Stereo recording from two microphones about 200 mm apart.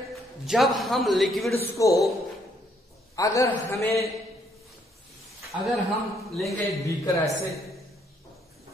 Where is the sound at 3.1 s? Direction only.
15° left (ahead or behind).